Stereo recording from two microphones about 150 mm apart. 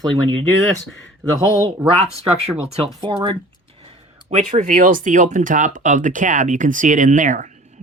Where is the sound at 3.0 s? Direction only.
40° right (ahead or behind).